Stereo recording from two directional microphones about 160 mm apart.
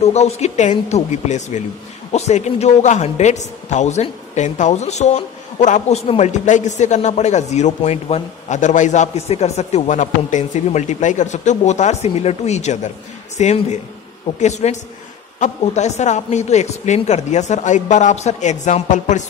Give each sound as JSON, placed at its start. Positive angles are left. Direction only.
{"t": 0.0, "sound": "a man's voice", "side_deg": 40}